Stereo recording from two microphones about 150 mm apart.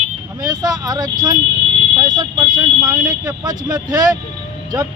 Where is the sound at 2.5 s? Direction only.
25° right (ahead or behind).